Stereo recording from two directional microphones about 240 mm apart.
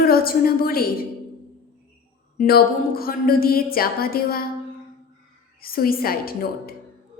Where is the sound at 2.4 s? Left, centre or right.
Left.